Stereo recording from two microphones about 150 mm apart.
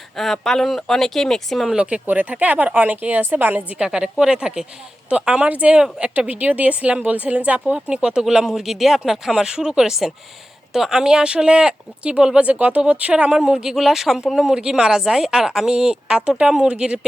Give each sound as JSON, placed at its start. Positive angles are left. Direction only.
{"t": 0.2, "sound": "speech", "side_deg": 0}